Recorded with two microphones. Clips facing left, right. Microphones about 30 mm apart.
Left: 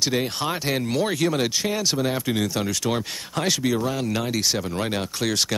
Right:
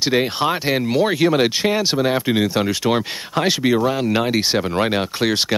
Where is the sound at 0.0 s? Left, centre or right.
Right.